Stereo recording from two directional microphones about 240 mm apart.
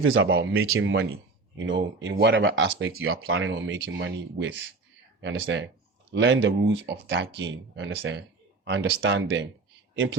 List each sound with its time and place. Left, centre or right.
0.0 s speech: right
0.3 s speech: right
0.7 s speech: right